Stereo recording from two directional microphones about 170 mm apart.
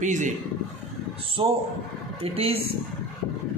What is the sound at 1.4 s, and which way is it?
A man's voice, 30° right (ahead or behind).